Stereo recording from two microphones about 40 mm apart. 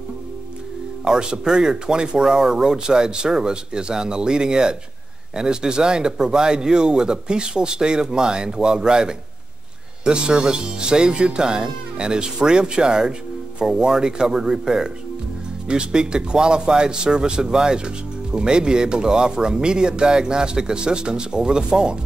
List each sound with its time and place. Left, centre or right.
1.0 s speech: centre